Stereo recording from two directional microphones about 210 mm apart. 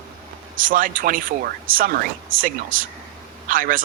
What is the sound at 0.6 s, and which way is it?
Speech, 40° right (ahead or behind).